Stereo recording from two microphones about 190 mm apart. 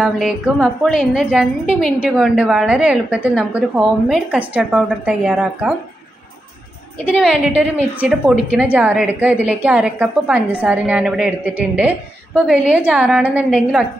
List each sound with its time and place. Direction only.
0.0 s a woman's voice: centre (ahead or behind)
7.1 s a woman's voice: 5° right (ahead or behind)